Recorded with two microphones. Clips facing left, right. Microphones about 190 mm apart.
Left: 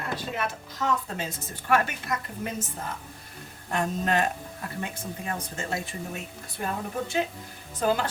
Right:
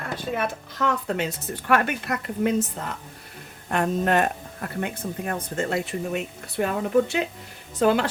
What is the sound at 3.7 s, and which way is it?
Speech, 60° right (ahead or behind).